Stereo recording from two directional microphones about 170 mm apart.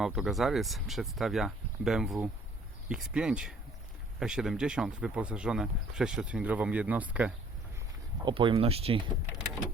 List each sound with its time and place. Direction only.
0.0 s speech: centre (ahead or behind)
8.2 s speech: 30° right (ahead or behind)